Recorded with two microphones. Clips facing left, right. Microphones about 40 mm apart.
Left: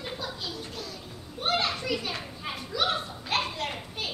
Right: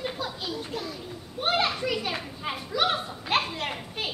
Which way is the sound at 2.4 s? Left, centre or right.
Centre.